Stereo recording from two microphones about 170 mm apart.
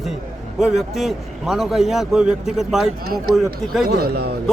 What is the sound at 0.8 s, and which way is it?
A man's voice, centre (ahead or behind).